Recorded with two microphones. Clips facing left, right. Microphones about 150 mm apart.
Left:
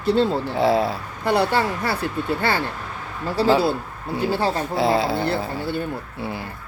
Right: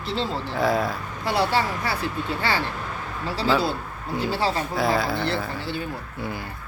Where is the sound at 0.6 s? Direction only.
30° left (ahead or behind).